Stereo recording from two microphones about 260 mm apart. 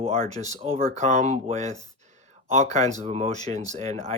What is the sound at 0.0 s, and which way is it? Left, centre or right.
Speech, right.